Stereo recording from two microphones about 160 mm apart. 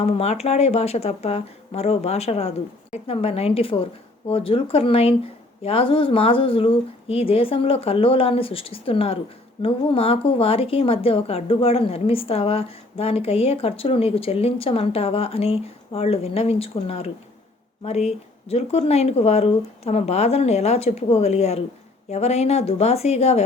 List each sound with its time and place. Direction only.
0.0 s a woman's voice: 40° left (ahead or behind)